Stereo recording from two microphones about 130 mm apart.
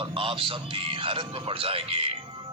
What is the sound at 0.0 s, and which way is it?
Speech, 45° right (ahead or behind).